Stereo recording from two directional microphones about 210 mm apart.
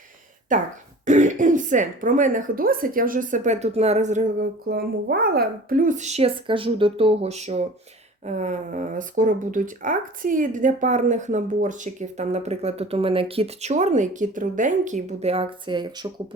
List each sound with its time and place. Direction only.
0.5 s speech: 40° right (ahead or behind); by 16.2 s 20° right (ahead or behind)